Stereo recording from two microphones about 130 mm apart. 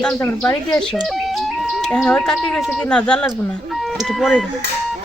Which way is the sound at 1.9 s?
5° left (ahead or behind).